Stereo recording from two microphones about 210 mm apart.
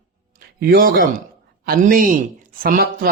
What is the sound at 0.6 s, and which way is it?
Speech, 45° right (ahead or behind).